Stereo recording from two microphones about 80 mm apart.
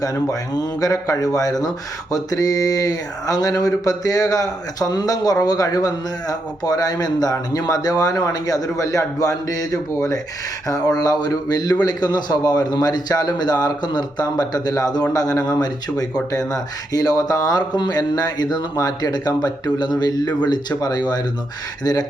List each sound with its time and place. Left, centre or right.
0.0 s speech: left
16.9 s speech: left